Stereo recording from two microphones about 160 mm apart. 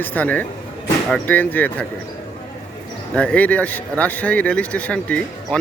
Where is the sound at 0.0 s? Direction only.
10° left (ahead or behind).